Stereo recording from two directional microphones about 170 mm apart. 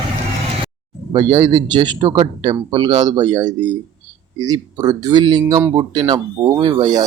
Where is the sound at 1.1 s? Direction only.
25° right (ahead or behind).